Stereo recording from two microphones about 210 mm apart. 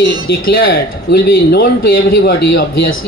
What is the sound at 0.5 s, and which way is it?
Speech, 50° left (ahead or behind).